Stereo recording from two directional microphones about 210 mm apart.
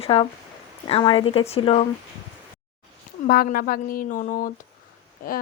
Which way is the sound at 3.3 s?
45° left (ahead or behind).